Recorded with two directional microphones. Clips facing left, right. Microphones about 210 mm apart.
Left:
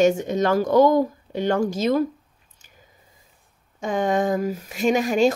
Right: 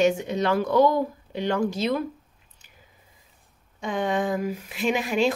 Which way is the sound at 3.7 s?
45° left (ahead or behind).